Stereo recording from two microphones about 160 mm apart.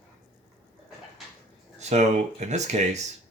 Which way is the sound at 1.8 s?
45° right (ahead or behind).